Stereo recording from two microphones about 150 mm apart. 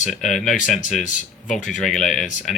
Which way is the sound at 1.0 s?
60° left (ahead or behind).